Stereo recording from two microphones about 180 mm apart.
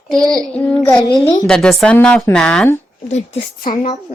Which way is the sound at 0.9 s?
20° left (ahead or behind).